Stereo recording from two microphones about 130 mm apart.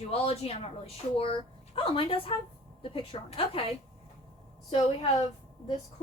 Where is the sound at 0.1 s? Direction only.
50° left (ahead or behind).